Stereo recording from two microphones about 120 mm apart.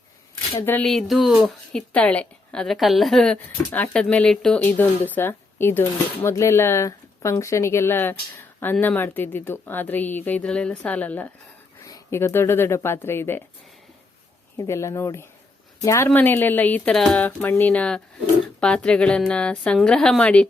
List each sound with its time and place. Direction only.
0.6 s a woman's voice: 15° left (ahead or behind)
0.9 s speech: centre (ahead or behind)
1.9 s a woman's voice: 10° left (ahead or behind)
11.9 s speech: 25° left (ahead or behind)
14.6 s speech: 25° left (ahead or behind)
16.0 s a woman's voice: 15° left (ahead or behind)